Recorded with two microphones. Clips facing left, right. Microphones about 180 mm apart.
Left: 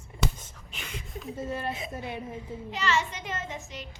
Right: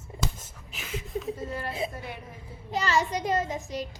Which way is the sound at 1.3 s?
25° left (ahead or behind).